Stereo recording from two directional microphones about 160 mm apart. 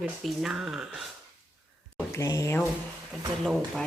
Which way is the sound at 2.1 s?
20° left (ahead or behind).